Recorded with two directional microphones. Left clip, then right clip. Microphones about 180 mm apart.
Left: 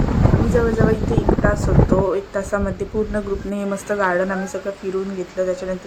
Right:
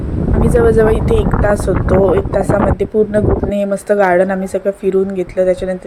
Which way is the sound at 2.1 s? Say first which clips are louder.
Right 8 dB; 25° right (ahead or behind).